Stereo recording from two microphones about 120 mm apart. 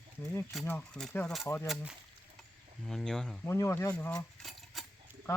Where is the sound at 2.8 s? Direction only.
5° left (ahead or behind).